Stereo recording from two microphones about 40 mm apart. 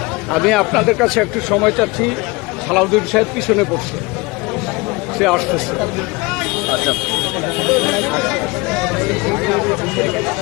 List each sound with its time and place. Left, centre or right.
0.3 s a man's voice: centre
5.1 s speech: centre
6.4 s vehicle: centre